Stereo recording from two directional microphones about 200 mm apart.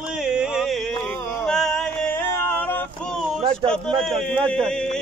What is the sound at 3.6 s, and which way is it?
Speech, 5° left (ahead or behind).